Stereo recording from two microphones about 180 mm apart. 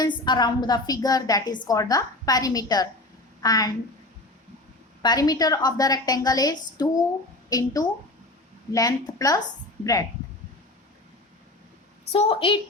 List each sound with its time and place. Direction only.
0.0 s a woman's voice: 25° left (ahead or behind)
5.0 s a woman's voice: 20° left (ahead or behind)
12.1 s a woman's voice: 30° left (ahead or behind)